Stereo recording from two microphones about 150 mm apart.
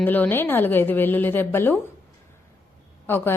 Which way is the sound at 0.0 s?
10° left (ahead or behind).